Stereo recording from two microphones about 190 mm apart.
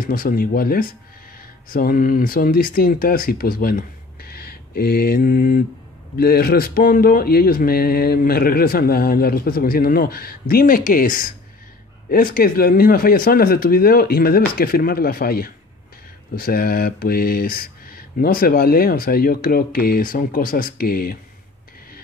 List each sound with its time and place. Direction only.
0.0 s speech: 50° left (ahead or behind)